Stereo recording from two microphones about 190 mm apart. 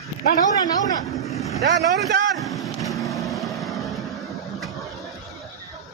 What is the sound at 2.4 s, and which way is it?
Vehicle, centre (ahead or behind).